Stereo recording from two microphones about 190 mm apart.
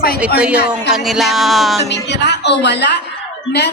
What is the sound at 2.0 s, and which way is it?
Speech, 65° left (ahead or behind).